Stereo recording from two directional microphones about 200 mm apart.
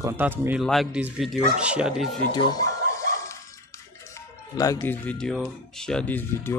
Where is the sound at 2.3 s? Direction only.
20° left (ahead or behind).